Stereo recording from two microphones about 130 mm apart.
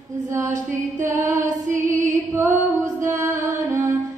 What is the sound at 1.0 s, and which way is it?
Music, 25° right (ahead or behind).